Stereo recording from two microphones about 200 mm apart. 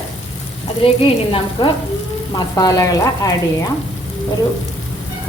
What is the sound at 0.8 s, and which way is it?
Speech, 25° left (ahead or behind).